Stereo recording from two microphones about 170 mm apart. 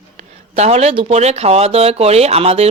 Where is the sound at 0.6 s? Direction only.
40° right (ahead or behind).